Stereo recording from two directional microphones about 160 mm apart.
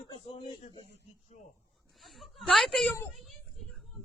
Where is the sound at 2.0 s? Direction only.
Centre (ahead or behind).